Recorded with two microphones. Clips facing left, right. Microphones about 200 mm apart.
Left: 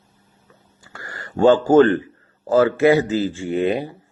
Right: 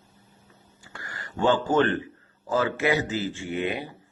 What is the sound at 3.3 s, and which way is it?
Speech, 35° left (ahead or behind).